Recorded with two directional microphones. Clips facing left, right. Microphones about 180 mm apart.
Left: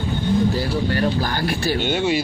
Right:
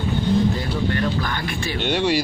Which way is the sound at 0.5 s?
35° left (ahead or behind).